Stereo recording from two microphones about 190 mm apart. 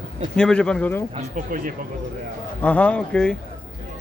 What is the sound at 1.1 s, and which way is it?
Speech, 40° right (ahead or behind).